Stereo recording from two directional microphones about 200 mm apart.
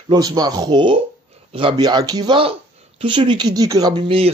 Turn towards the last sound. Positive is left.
turn(degrees=-25)  # may be behind; listen again after turning